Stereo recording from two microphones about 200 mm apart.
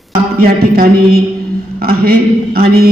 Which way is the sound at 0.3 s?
50° right (ahead or behind).